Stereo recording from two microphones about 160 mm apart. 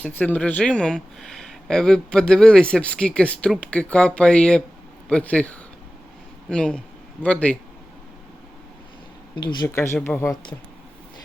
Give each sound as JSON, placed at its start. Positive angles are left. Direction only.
{"t": 0.0, "sound": "a man's voice", "side_deg": 10}
{"t": 9.3, "sound": "speech", "side_deg": 30}
{"t": 9.6, "sound": "speech", "side_deg": 15}